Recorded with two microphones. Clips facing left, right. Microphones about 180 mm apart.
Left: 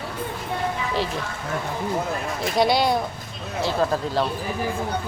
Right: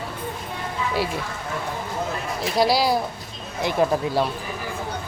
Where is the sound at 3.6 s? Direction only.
15° right (ahead or behind).